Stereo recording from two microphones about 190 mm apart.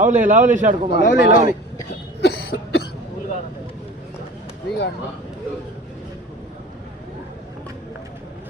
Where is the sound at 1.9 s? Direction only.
60° left (ahead or behind).